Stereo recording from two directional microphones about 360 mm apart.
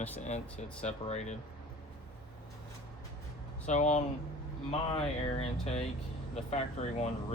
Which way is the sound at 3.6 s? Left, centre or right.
Centre.